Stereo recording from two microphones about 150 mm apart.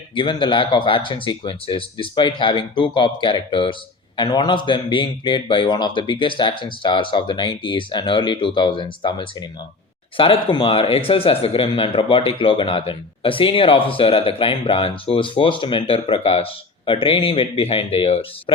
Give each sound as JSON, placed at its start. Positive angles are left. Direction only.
{"t": 0.1, "sound": "speech", "side_deg": 35}